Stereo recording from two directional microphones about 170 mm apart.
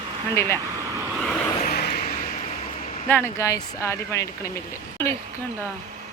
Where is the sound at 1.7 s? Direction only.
70° left (ahead or behind).